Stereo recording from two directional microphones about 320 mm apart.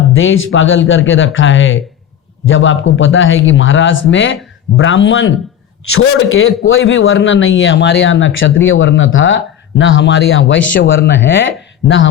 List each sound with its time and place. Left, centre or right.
0.1 s speech: left